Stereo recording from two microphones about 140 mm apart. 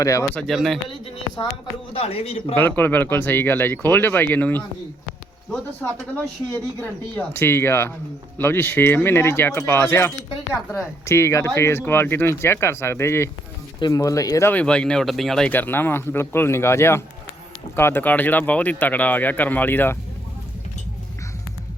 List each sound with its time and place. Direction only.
0.0 s speech: 25° left (ahead or behind)
0.3 s speech: centre (ahead or behind)
1.9 s a man's voice: 45° left (ahead or behind)
2.6 s speech: 15° left (ahead or behind)
14.5 s speech: 10° left (ahead or behind)